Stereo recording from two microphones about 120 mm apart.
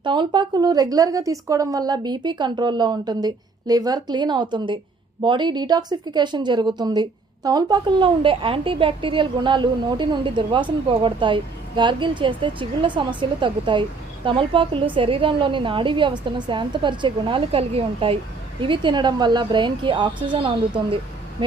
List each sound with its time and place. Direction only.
0.0 s a woman's voice: 40° right (ahead or behind)